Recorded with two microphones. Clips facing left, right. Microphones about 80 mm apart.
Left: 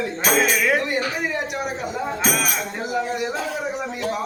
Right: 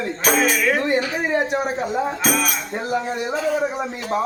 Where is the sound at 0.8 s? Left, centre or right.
Right.